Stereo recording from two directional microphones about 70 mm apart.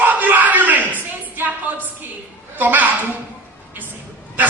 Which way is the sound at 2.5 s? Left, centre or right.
Right.